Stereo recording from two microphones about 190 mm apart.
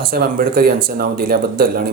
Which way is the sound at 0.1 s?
50° right (ahead or behind).